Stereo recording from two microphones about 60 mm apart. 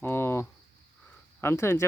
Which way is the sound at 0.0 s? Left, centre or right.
Left.